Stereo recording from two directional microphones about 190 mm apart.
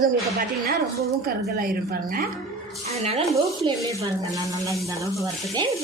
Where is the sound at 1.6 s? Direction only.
50° right (ahead or behind).